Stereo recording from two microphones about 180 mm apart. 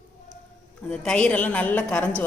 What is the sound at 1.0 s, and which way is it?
A woman's voice, 5° left (ahead or behind).